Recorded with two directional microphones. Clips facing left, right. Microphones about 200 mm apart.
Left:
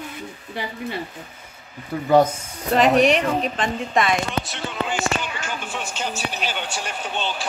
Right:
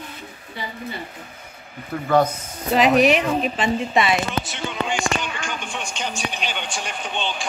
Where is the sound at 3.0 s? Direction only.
5° right (ahead or behind).